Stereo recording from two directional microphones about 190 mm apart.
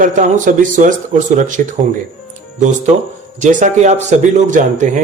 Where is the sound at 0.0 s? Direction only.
40° right (ahead or behind).